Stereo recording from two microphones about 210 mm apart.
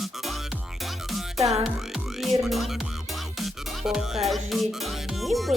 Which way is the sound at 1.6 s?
Centre (ahead or behind).